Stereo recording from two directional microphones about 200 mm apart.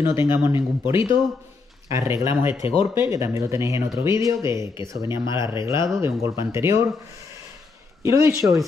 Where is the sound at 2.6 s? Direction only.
30° left (ahead or behind).